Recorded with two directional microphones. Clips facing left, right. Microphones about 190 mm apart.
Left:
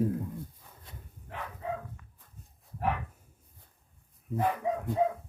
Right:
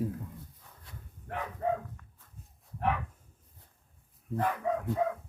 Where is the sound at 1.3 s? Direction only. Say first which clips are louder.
Right 4 dB; 60° right (ahead or behind).